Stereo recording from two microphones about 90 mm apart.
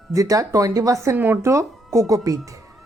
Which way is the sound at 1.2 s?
20° right (ahead or behind).